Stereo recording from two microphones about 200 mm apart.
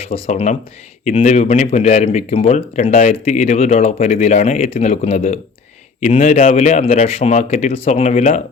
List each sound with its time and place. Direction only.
0.0 s speech: 30° left (ahead or behind)